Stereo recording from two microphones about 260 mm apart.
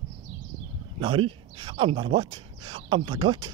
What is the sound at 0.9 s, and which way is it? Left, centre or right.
Speech, centre.